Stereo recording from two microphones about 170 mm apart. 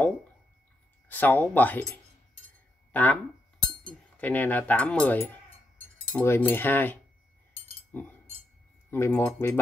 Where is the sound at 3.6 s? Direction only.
5° left (ahead or behind).